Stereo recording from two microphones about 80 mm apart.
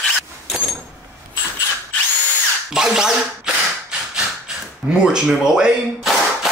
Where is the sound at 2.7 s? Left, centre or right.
Centre.